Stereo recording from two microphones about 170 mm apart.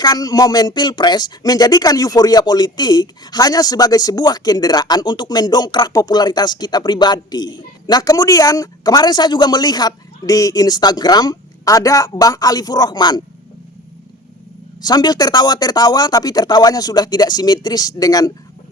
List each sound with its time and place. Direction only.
0.0 s speech: 20° left (ahead or behind)
14.8 s speech: 25° left (ahead or behind)